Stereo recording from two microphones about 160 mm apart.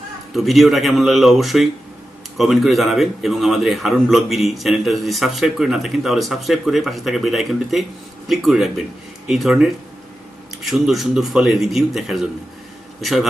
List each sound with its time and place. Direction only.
0.3 s a man's voice: centre (ahead or behind)